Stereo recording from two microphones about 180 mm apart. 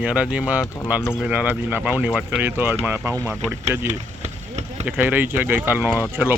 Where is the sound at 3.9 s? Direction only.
40° right (ahead or behind).